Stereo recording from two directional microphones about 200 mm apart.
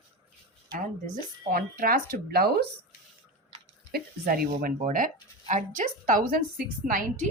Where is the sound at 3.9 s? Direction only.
50° right (ahead or behind).